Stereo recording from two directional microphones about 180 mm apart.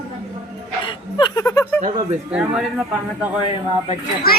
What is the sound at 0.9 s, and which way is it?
Speech, 25° left (ahead or behind).